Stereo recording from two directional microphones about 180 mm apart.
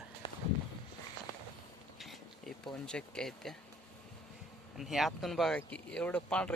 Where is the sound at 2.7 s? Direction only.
5° left (ahead or behind).